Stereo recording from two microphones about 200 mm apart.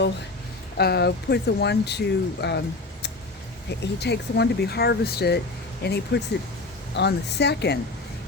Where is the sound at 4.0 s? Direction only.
55° left (ahead or behind).